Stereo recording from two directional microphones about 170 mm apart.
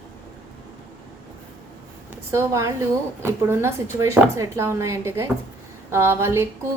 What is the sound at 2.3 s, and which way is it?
A woman's voice, 15° right (ahead or behind).